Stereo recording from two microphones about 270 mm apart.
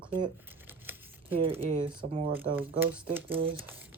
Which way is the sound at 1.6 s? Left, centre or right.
Centre.